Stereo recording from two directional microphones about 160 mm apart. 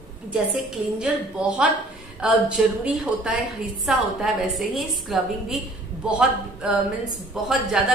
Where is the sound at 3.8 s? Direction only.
Centre (ahead or behind).